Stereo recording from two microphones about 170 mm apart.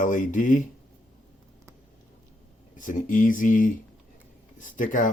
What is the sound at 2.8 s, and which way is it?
Speech, 50° left (ahead or behind).